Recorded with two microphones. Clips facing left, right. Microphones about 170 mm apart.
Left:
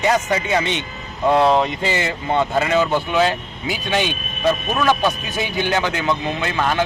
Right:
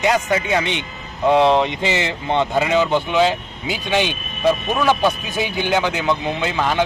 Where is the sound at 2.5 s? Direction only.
15° right (ahead or behind).